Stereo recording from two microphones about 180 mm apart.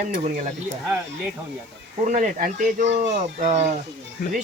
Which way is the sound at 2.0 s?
45° right (ahead or behind).